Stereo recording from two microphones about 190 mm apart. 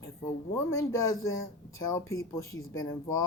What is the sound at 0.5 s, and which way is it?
Speech, 15° left (ahead or behind).